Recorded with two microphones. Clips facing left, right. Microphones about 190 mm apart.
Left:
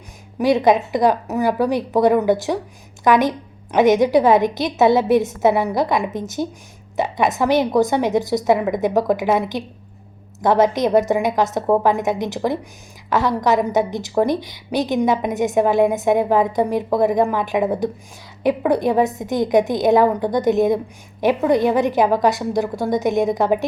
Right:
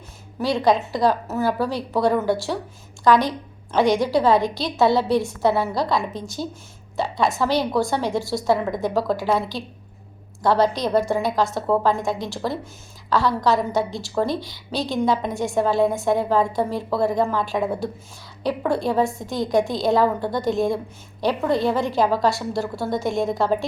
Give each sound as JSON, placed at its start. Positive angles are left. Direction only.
{"t": 0.3, "sound": "a woman's voice", "side_deg": 20}